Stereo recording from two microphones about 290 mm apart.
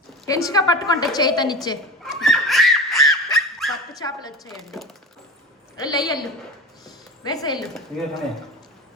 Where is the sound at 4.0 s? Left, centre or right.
Centre.